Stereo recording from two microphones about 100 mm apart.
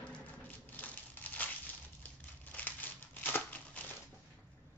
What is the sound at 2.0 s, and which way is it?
Crumpling, 15° left (ahead or behind).